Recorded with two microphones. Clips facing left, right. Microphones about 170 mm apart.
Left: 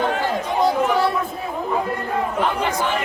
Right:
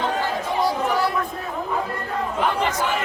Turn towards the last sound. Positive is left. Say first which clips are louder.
# left 3 dB
turn(degrees=25)  # may be behind; listen again after turning